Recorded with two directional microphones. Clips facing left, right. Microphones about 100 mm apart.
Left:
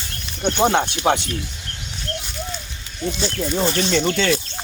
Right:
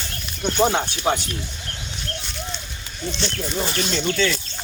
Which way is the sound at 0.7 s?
65° left (ahead or behind).